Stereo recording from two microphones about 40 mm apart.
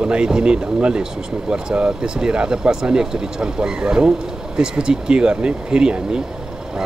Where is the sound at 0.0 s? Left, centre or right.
Centre.